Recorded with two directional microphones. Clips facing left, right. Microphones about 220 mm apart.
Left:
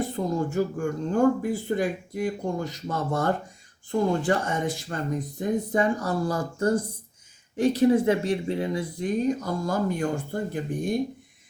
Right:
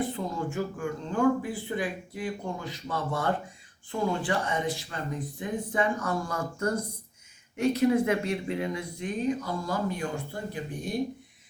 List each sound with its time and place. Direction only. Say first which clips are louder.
0.0 s speech: left 4 dB; 40° left (ahead or behind)